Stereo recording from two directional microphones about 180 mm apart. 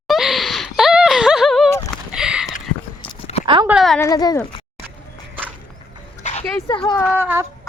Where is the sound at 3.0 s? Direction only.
35° left (ahead or behind).